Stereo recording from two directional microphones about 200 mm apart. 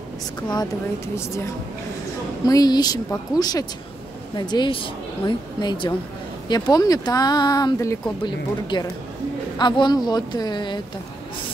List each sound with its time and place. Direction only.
1.1 s a woman's voice: 15° left (ahead or behind)